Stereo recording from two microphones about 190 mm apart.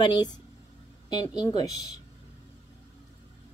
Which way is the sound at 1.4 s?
20° left (ahead or behind).